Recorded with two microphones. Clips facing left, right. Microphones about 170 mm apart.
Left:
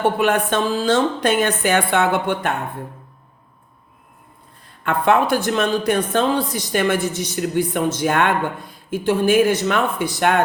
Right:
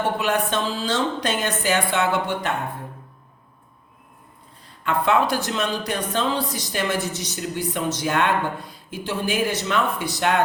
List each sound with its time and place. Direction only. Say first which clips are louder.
0.2 s a woman's voice: left 5 dB; 55° left (ahead or behind)
4.8 s speech: left 3 dB; 55° left (ahead or behind)